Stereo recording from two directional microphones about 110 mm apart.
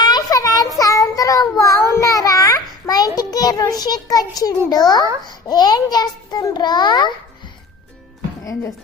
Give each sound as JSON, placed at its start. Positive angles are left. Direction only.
{"t": 0.0, "sound": "a sound", "side_deg": 35}
{"t": 0.8, "sound": "child singing", "side_deg": 30}
{"t": 3.3, "sound": "a child's voice", "side_deg": 35}